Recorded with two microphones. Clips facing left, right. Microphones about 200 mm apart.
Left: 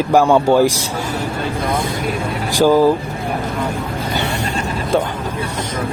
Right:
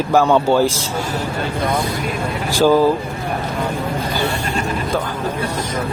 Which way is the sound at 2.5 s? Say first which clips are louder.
Left 1 dB; 15° left (ahead or behind).